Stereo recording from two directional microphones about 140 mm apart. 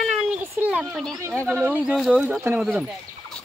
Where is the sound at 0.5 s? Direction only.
10° right (ahead or behind).